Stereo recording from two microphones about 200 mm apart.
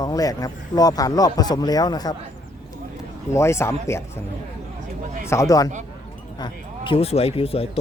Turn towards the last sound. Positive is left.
turn(degrees=30)  # may be behind; listen again after turning